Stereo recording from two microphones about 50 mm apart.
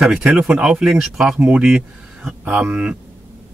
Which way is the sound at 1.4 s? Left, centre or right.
Right.